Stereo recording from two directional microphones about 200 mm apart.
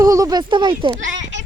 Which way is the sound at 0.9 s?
65° right (ahead or behind).